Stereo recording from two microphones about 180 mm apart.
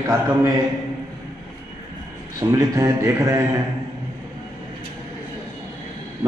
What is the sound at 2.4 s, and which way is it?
A man's voice, 20° right (ahead or behind).